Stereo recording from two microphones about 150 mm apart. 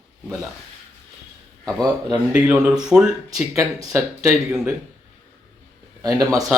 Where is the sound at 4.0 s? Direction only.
5° right (ahead or behind).